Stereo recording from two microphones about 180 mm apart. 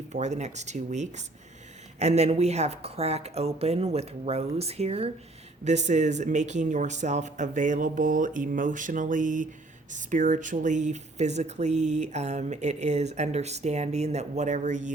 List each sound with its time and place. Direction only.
0.1 s speech: 40° right (ahead or behind)